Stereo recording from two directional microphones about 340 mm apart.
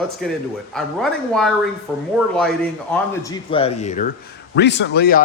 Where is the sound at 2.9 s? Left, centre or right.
Centre.